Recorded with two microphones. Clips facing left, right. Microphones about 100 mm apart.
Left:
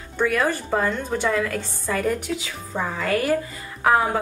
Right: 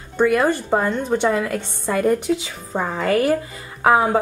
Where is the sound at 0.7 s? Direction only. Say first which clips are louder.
Right 4 dB; 30° right (ahead or behind).